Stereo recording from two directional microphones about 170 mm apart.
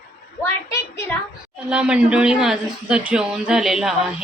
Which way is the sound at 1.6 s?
5° right (ahead or behind).